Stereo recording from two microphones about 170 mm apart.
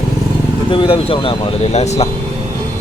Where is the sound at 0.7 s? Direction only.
30° left (ahead or behind).